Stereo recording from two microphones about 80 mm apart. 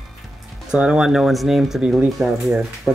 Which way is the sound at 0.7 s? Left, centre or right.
Centre.